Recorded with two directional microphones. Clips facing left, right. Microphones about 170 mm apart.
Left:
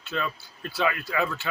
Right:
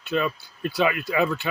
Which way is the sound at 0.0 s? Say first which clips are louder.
Right 6 dB; 15° right (ahead or behind).